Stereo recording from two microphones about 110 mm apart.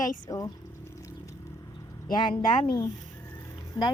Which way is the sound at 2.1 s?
45° left (ahead or behind).